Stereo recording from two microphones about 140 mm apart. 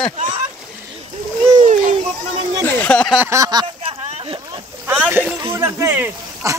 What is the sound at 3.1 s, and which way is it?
Speech, 20° right (ahead or behind).